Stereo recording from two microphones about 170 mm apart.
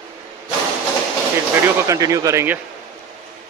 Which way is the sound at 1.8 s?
20° right (ahead or behind).